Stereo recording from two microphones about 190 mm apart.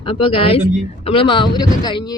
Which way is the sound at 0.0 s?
30° left (ahead or behind).